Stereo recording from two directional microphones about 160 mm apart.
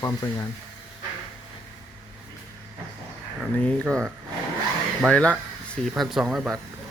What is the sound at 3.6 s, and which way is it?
Speech, 5° left (ahead or behind).